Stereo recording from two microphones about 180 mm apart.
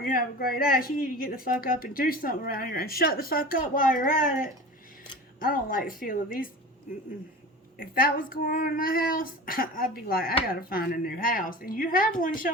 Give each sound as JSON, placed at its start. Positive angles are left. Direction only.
{"t": 0.0, "sound": "speech", "side_deg": 55}
{"t": 5.4, "sound": "speech", "side_deg": 50}
{"t": 7.8, "sound": "speech", "side_deg": 55}